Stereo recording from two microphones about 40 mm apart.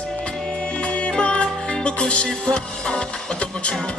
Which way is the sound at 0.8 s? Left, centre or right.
Left.